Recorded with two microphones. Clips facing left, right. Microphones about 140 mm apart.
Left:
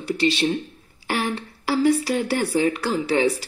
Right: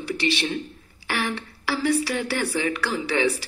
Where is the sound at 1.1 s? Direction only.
40° left (ahead or behind).